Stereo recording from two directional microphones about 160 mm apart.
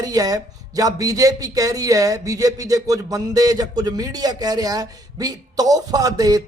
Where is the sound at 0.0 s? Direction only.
25° right (ahead or behind).